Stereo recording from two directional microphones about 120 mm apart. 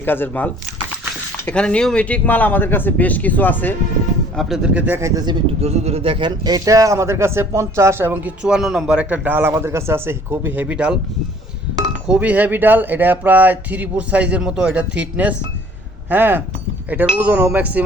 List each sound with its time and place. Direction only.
0.0 s speech: 15° left (ahead or behind)
4.4 s speech: centre (ahead or behind)
4.7 s speech: 15° right (ahead or behind); by 5.4 s 35° right (ahead or behind)
5.6 s speech: 60° right (ahead or behind); by 10.9 s 10° right (ahead or behind)
12.0 s speech: 10° right (ahead or behind)